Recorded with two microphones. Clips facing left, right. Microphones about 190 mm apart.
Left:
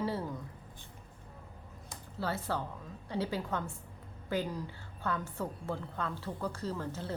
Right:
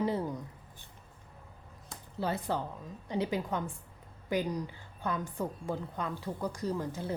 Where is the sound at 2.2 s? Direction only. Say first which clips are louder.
Right 2 dB; 15° right (ahead or behind).